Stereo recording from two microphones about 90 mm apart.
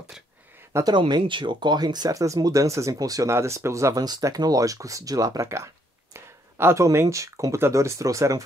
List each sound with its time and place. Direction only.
0.8 s speech: 60° right (ahead or behind); by 4.0 s 35° right (ahead or behind)
4.0 s speech: 45° right (ahead or behind)